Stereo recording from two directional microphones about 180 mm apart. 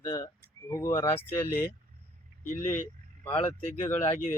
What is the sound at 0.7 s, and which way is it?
Speech, 15° left (ahead or behind).